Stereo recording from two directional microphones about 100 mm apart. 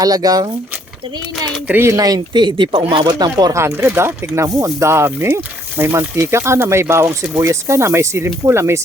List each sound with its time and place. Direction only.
0.0 s speech: 40° right (ahead or behind)
1.8 s speech: 35° right (ahead or behind)
3.5 s speech: 25° right (ahead or behind)